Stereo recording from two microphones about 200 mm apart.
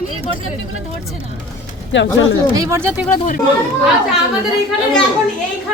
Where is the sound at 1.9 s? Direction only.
65° left (ahead or behind).